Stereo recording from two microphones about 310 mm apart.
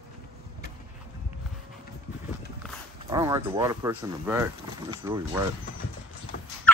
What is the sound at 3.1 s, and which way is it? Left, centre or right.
Speech, centre.